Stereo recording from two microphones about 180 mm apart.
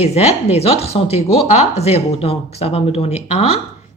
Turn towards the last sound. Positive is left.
turn(degrees=35)  # may be behind; listen again after turning